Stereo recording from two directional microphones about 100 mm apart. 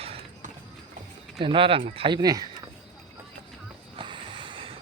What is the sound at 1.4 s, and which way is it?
Speech, 60° right (ahead or behind).